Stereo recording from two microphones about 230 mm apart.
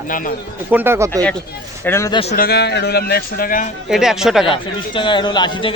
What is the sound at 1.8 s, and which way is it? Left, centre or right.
Speech, centre.